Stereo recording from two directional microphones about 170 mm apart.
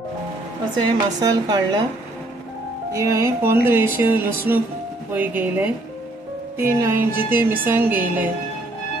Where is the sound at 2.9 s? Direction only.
15° right (ahead or behind).